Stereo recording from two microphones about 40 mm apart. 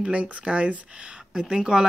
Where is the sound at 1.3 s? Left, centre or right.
Centre.